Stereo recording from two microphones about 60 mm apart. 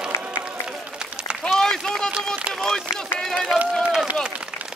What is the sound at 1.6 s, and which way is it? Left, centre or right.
Run, centre.